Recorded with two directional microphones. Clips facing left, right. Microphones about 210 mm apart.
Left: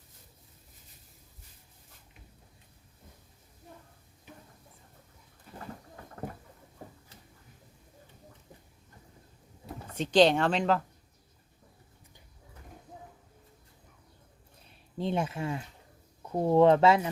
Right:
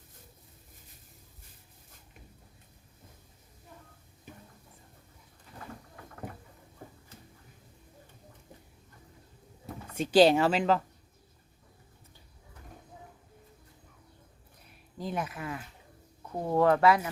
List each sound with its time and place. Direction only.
9.9 s speech: 10° right (ahead or behind)
14.9 s speech: 25° left (ahead or behind)